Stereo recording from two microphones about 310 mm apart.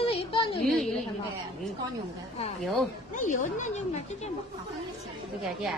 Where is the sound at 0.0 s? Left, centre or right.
Centre.